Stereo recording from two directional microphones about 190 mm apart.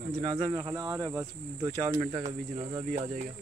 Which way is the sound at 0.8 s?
15° right (ahead or behind).